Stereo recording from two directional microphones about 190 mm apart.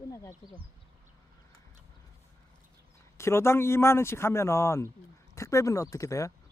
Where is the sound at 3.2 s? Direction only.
15° left (ahead or behind).